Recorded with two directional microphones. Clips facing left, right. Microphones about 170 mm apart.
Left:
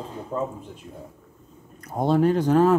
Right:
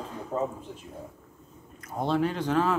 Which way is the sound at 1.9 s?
45° left (ahead or behind).